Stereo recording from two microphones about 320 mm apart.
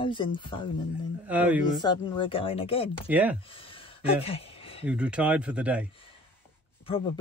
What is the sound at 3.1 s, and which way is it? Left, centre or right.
Speech, centre.